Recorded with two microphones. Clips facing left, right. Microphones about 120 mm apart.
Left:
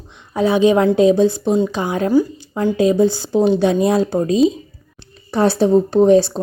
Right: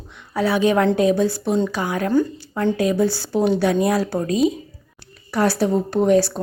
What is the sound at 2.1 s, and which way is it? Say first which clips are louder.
Speech: left 3 dB; 10° left (ahead or behind).